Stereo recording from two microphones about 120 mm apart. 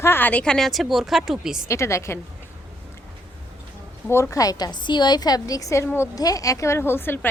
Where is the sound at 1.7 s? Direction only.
25° left (ahead or behind).